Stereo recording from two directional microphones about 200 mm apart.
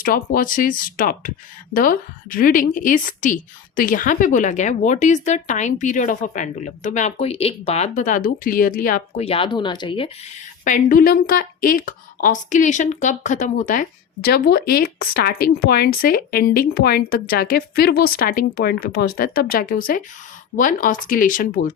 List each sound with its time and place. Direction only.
0.0 s a woman's voice: 45° left (ahead or behind)
9.2 s speech: 25° left (ahead or behind)
10.6 s a woman's voice: 40° left (ahead or behind)